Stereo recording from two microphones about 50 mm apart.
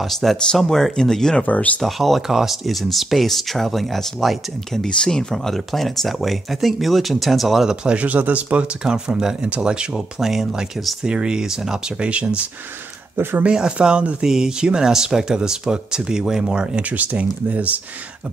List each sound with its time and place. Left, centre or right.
0.2 s speech: centre
1.4 s speech: left
1.8 s speech: centre
4.8 s speech: centre
7.8 s speech: right
8.8 s speech: centre
10.2 s speech: centre
11.1 s speech: centre
13.4 s speech: centre
14.2 s speech: centre
16.9 s speech: right